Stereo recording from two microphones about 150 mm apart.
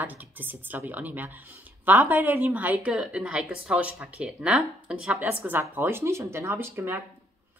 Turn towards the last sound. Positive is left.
turn(degrees=-15)  # may be behind; listen again after turning